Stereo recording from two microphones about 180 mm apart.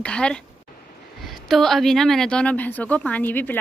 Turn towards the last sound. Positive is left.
turn(degrees=10)  # may be behind; listen again after turning